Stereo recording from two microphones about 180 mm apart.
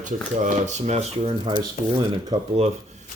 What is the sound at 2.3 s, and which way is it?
Speech, 20° right (ahead or behind).